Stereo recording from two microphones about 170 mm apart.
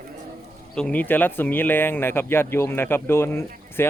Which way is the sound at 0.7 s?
5° left (ahead or behind).